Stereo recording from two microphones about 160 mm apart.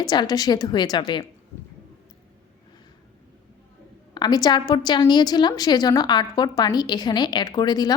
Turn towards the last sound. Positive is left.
turn(degrees=25)  # may be behind; listen again after turning